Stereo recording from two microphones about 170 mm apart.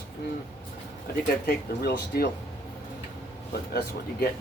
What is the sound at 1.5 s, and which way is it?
Speech, 65° left (ahead or behind).